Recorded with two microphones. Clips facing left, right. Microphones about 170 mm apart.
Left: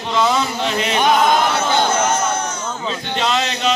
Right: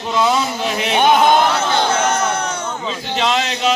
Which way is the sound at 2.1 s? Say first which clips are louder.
Right 1 dB; 60° right (ahead or behind).